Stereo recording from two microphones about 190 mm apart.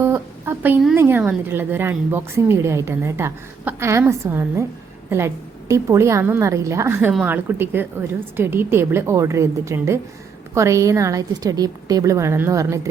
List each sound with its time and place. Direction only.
0.0 s a woman's voice: 10° right (ahead or behind)